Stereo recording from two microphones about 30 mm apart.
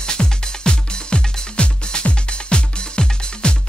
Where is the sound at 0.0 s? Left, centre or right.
Left.